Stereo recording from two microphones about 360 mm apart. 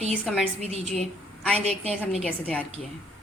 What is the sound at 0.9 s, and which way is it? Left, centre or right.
Speech, centre.